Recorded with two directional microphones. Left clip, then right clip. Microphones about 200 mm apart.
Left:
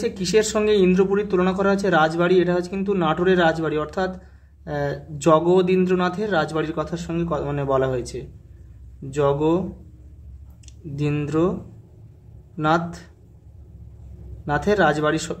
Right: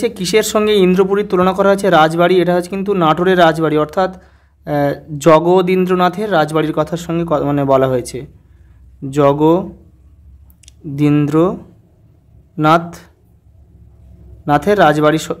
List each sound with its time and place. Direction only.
0.0 s speech: 35° right (ahead or behind)
12.5 s speech: 35° right (ahead or behind)
14.4 s speech: 35° right (ahead or behind)